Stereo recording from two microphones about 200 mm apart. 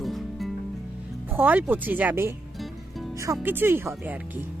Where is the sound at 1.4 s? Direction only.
10° right (ahead or behind).